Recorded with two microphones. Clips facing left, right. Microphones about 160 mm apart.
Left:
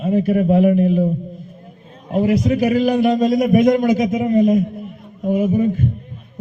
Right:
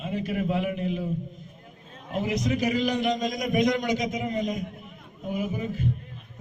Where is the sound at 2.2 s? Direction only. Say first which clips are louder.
Left 10 dB; 50° left (ahead or behind).